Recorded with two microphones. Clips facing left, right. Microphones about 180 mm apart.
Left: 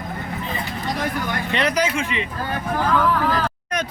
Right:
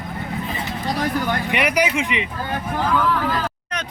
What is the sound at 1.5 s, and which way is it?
Speech, 10° right (ahead or behind).